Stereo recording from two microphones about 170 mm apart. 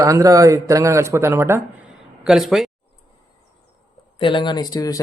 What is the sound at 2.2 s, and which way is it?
Speech, centre (ahead or behind).